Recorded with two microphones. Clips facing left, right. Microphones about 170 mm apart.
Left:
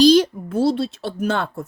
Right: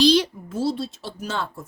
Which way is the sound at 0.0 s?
45° left (ahead or behind).